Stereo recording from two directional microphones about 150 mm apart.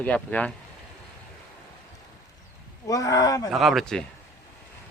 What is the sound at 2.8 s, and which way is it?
Speech, 20° left (ahead or behind).